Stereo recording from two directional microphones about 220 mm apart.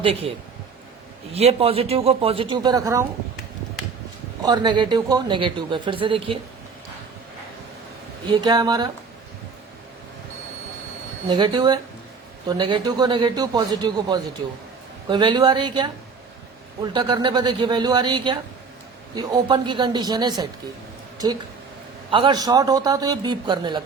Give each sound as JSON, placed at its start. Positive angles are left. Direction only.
{"t": 0.0, "sound": "speech", "side_deg": -25}
{"t": 4.4, "sound": "speech", "side_deg": -20}
{"t": 8.3, "sound": "speech", "side_deg": -20}
{"t": 11.3, "sound": "speech", "side_deg": -20}